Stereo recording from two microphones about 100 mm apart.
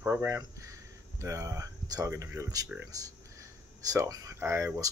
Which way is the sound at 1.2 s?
35° right (ahead or behind).